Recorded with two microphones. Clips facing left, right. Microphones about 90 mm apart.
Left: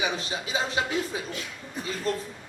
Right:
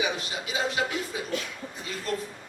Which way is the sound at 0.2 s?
30° left (ahead or behind).